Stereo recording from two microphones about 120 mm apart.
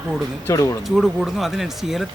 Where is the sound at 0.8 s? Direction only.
5° right (ahead or behind).